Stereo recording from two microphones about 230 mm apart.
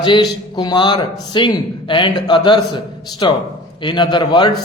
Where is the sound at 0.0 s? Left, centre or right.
Centre.